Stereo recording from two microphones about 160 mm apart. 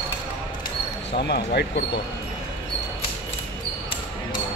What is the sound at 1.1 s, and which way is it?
Speech, 90° left.